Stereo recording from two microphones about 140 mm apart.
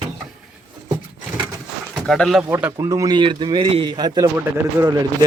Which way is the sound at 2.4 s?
20° right (ahead or behind).